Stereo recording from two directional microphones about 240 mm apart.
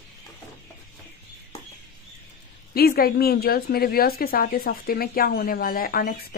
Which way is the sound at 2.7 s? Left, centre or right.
Left.